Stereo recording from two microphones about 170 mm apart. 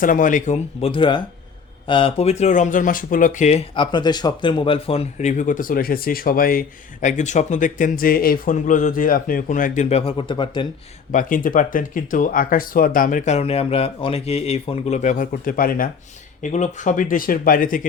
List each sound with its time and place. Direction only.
0.0 s speech: 50° left (ahead or behind)
3.8 s speech: 25° left (ahead or behind); by 9.8 s 50° left (ahead or behind)
9.9 s speech: 35° left (ahead or behind)
11.1 s speech: 50° left (ahead or behind)
16.4 s speech: 45° left (ahead or behind)